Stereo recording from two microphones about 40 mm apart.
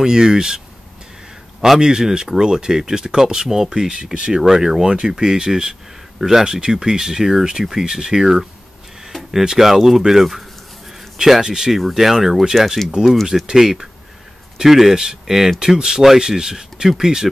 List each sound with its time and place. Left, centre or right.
0.0 s speech: centre
1.8 s speech: centre
4.4 s speech: centre
11.4 s speech: centre
13.5 s speech: centre